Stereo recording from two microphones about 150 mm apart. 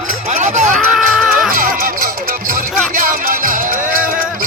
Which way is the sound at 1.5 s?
65° right (ahead or behind).